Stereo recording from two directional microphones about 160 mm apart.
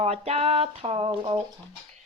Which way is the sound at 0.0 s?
40° right (ahead or behind).